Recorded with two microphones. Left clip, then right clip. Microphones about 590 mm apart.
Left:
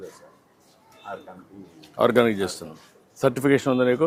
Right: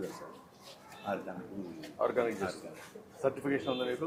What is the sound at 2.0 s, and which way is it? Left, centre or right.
Speech, left.